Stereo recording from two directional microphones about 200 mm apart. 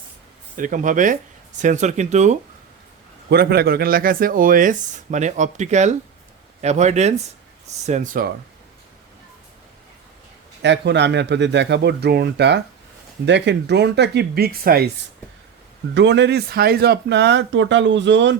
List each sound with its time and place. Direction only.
0.5 s speech: 40° right (ahead or behind)
3.2 s speech: 55° right (ahead or behind)
10.6 s speech: 60° right (ahead or behind)
16.0 s speech: 60° right (ahead or behind)